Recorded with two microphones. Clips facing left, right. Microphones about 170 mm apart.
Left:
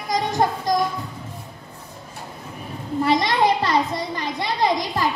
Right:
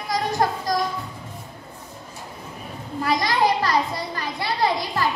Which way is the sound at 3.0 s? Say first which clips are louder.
Left 2 dB; 25° left (ahead or behind).